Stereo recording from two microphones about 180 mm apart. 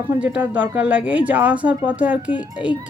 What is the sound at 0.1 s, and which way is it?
Speech, 10° right (ahead or behind).